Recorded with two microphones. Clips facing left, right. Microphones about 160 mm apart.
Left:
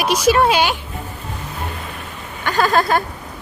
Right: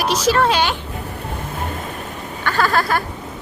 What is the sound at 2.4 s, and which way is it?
Speech, 20° left (ahead or behind).